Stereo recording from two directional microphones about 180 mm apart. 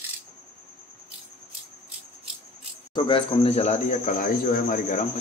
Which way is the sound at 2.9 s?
30° left (ahead or behind).